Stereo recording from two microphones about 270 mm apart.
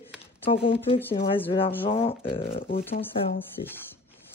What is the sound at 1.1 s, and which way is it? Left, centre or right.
Speech, left.